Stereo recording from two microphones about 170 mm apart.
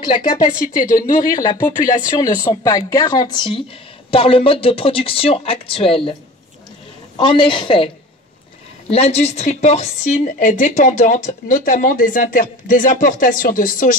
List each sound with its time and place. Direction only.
0.2 s a woman's voice: 50° left (ahead or behind)
2.0 s speech: 20° left (ahead or behind)
7.2 s speech: 30° left (ahead or behind)
8.9 s a woman's voice: 35° left (ahead or behind); by 13.9 s 50° left (ahead or behind)